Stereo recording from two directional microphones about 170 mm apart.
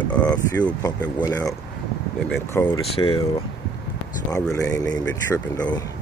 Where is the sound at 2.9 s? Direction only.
30° left (ahead or behind).